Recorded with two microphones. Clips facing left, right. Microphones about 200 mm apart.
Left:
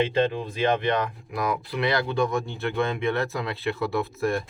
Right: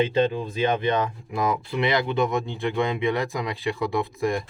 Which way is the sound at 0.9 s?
20° right (ahead or behind).